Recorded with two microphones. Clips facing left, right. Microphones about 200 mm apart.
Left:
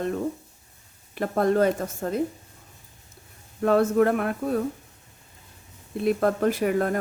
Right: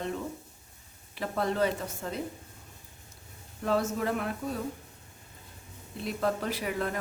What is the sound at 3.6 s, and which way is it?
Speech, 55° left (ahead or behind).